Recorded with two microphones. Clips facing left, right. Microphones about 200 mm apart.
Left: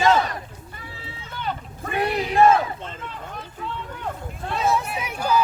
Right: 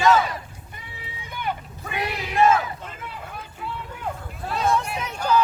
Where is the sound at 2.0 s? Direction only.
30° left (ahead or behind).